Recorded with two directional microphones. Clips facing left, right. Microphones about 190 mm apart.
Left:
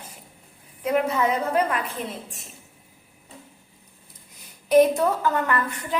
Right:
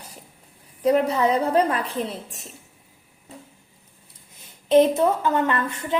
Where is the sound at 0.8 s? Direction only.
35° right (ahead or behind).